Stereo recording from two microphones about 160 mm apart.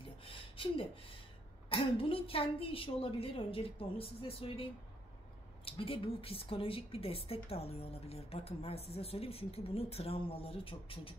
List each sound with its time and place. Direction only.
0.0 s a sound: 35° left (ahead or behind)
1.7 s a woman's voice: 35° left (ahead or behind)
5.7 s a woman's voice: 35° left (ahead or behind)